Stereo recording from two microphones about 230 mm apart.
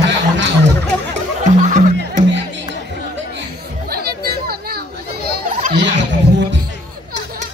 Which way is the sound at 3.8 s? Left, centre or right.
Right.